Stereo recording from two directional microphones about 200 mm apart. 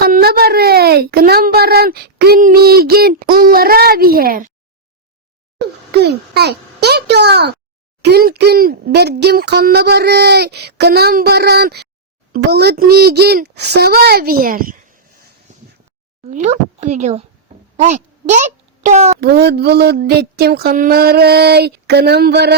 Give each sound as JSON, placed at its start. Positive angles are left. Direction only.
{"t": 0.0, "sound": "a child's voice", "side_deg": -50}
{"t": 5.9, "sound": "a child's voice", "side_deg": -55}
{"t": 15.5, "sound": "a sound", "side_deg": -35}
{"t": 16.3, "sound": "a woman's voice", "side_deg": -35}
{"t": 19.2, "sound": "speech", "side_deg": -55}